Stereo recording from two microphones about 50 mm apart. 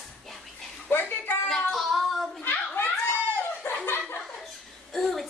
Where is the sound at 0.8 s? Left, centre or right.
Left.